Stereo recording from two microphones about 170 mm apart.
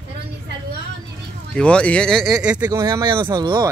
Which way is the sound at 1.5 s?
5° left (ahead or behind).